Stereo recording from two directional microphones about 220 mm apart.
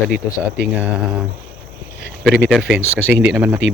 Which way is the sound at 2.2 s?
Centre (ahead or behind).